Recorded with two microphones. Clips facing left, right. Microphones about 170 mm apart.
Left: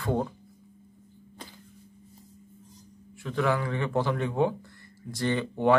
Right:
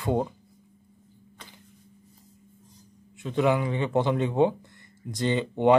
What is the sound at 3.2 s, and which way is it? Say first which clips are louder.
A man's voice: right 3 dB; 20° right (ahead or behind).